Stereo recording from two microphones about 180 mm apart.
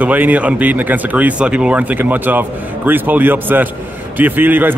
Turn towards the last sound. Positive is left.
turn(degrees=-10)  # may be behind; listen again after turning